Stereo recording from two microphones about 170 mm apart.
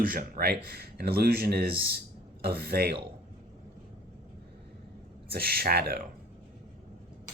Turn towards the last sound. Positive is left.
turn(degrees=-65)  # may be behind; listen again after turning